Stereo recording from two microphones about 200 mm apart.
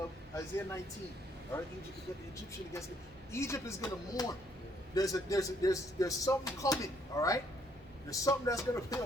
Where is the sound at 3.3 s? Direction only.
15° left (ahead or behind).